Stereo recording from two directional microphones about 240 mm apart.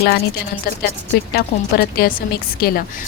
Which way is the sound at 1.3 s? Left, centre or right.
Left.